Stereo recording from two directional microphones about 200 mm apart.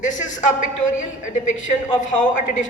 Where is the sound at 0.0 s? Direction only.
40° left (ahead or behind).